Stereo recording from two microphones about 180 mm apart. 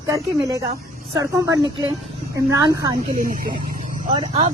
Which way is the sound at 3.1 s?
50° right (ahead or behind).